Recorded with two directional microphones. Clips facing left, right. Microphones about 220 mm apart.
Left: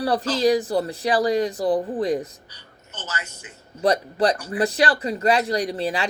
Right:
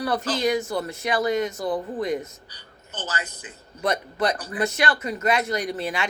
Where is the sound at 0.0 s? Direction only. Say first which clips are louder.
Left 4 dB; 30° left (ahead or behind).